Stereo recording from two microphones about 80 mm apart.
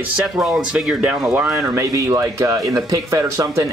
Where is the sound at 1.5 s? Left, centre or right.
Right.